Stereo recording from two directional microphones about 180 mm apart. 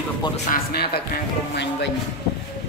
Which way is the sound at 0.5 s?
60° left (ahead or behind).